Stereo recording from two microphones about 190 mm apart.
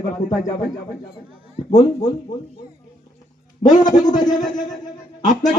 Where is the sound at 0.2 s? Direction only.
40° left (ahead or behind).